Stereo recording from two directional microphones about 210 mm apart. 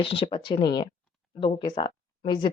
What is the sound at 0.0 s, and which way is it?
Speech, 25° left (ahead or behind).